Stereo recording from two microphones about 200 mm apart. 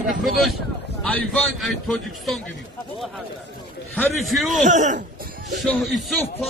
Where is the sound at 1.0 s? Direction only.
5° left (ahead or behind).